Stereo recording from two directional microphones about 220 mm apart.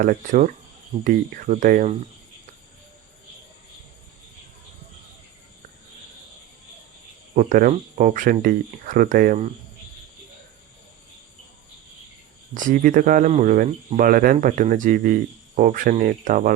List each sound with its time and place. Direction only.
0.0 s speech: 40° right (ahead or behind)
7.3 s speech: 40° right (ahead or behind)
12.5 s speech: 35° right (ahead or behind)